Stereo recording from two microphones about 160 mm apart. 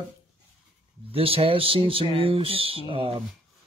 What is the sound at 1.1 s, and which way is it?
Speech, 35° right (ahead or behind).